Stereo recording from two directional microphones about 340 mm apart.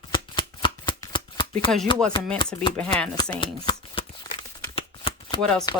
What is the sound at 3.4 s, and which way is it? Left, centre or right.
Shuffling cards, centre.